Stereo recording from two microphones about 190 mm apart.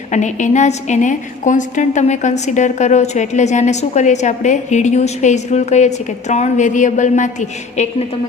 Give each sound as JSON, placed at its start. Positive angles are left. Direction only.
{"t": 0.1, "sound": "a woman's voice", "side_deg": 40}